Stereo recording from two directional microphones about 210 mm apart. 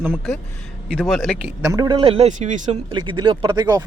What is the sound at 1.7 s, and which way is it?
Speech, 20° right (ahead or behind).